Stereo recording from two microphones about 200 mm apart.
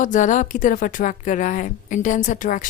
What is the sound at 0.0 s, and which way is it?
A woman's voice, 40° left (ahead or behind).